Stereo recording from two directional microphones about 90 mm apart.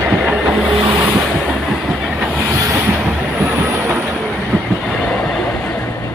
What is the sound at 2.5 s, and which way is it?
Vehicle, 35° right (ahead or behind).